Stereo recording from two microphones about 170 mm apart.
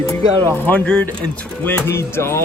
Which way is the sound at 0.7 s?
5° left (ahead or behind).